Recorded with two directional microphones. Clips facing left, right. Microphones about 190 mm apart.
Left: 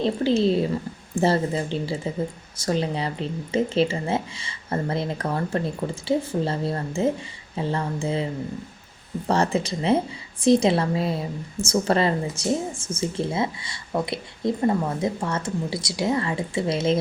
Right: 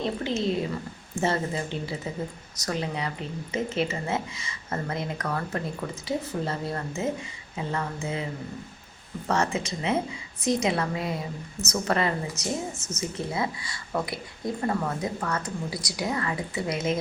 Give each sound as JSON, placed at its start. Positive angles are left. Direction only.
{"t": 0.0, "sound": "speech", "side_deg": 30}
{"t": 9.2, "sound": "speech", "side_deg": 35}